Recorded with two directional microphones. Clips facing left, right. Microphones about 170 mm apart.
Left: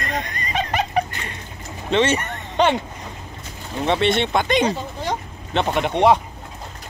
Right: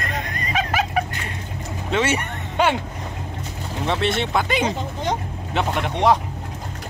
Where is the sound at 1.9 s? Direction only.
10° right (ahead or behind).